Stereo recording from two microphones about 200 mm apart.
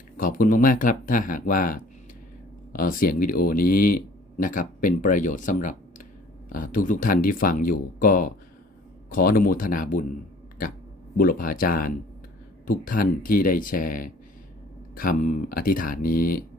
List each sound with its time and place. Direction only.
0.2 s speech: 45° left (ahead or behind)
11.2 s speech: 45° left (ahead or behind)